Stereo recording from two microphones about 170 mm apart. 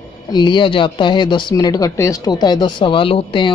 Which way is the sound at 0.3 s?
25° left (ahead or behind).